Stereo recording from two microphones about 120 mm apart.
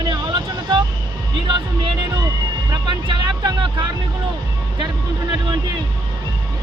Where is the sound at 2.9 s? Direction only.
40° right (ahead or behind).